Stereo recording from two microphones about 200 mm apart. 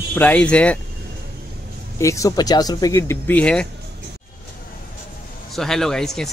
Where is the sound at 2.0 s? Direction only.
15° left (ahead or behind).